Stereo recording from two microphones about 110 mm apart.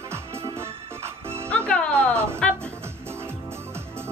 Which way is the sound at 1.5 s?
10° left (ahead or behind).